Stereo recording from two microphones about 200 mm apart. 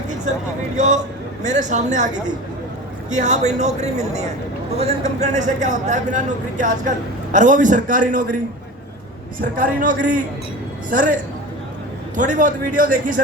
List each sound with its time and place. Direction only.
0.8 s speech: 35° right (ahead or behind)
3.1 s speech: 35° right (ahead or behind)
9.4 s speech: 40° right (ahead or behind)